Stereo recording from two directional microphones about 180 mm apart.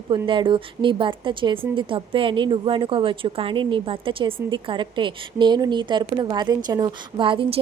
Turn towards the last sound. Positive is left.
turn(degrees=-30)  # may be behind; listen again after turning